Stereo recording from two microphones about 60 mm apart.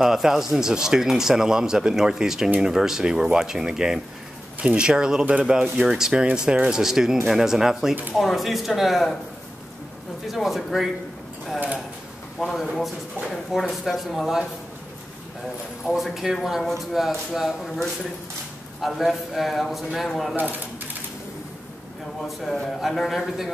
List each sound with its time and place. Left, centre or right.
0.0 s speech: centre
10.2 s speech: centre
12.4 s speech: centre
15.9 s speech: centre
20.3 s speech: right
22.4 s speech: centre